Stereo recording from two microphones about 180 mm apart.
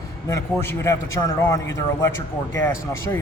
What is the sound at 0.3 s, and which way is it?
A man's voice, 15° left (ahead or behind).